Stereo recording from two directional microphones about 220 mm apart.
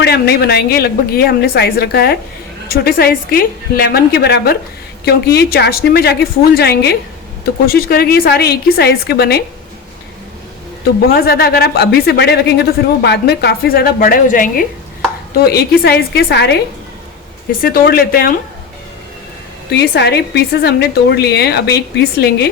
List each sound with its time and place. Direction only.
0.0 s speech: 45° left (ahead or behind)
11.1 s speech: 45° left (ahead or behind)
17.6 s speech: 40° left (ahead or behind)
19.7 s speech: 50° left (ahead or behind)